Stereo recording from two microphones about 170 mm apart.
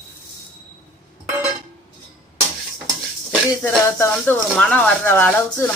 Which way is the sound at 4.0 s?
10° left (ahead or behind).